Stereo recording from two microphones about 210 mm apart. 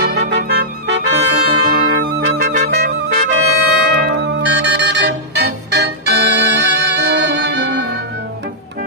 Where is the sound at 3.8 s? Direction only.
50° right (ahead or behind).